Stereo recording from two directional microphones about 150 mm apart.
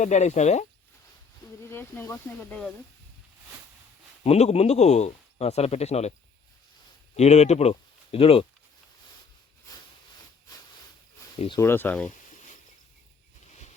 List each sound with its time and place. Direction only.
0.0 s speech: 50° left (ahead or behind)
1.6 s speech: 15° left (ahead or behind)
4.2 s speech: 45° left (ahead or behind)
7.2 s speech: 45° left (ahead or behind)
11.5 s speech: 15° left (ahead or behind)